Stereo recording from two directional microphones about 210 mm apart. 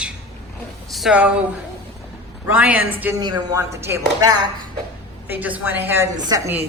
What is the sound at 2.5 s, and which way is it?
Speech, 5° right (ahead or behind).